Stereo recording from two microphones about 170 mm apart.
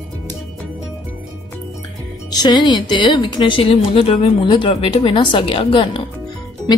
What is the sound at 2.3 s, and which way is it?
Speech, 25° left (ahead or behind).